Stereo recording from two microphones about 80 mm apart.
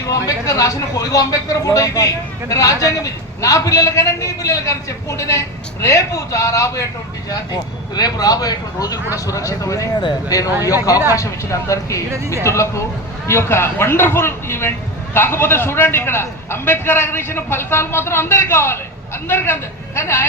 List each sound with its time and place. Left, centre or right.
0.1 s speech: left
7.3 s a man's voice: left